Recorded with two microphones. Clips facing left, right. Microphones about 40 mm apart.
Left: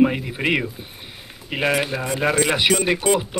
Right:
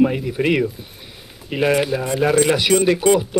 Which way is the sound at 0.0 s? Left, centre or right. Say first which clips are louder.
Right 1 dB; left.